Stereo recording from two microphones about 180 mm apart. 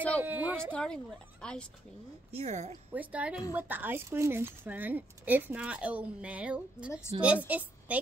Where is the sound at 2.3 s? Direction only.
40° right (ahead or behind).